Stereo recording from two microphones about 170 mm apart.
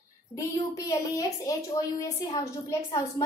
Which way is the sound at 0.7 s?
20° left (ahead or behind).